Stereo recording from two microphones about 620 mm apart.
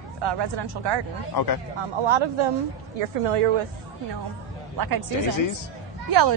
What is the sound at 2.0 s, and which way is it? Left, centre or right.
Speech, right.